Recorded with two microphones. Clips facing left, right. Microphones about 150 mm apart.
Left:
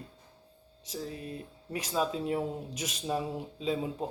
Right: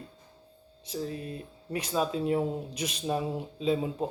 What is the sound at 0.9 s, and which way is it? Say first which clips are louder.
Speech: right 4 dB; 20° right (ahead or behind).